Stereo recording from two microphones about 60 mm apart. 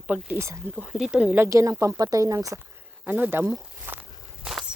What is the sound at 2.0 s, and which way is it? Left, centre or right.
Speech, right.